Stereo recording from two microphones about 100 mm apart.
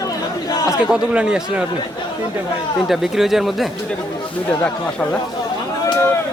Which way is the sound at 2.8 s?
5° right (ahead or behind).